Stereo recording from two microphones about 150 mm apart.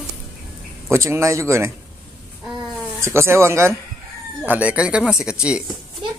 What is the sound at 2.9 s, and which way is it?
Speech, 20° right (ahead or behind).